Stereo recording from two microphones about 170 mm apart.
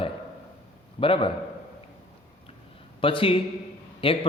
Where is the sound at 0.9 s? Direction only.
30° left (ahead or behind).